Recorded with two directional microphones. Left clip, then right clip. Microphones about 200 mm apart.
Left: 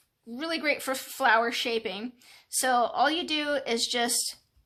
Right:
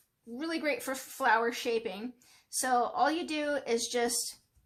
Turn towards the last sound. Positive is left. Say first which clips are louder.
# left 3 dB
turn(degrees=25)  # may be behind; listen again after turning